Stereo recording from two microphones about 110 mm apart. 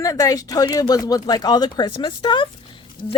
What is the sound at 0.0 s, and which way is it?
Speech, 30° left (ahead or behind).